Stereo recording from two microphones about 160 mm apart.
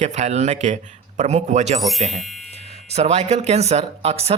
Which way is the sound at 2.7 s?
40° right (ahead or behind).